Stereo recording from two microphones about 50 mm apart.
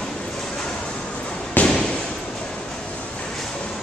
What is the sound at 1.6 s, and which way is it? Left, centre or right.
Fireworks, left.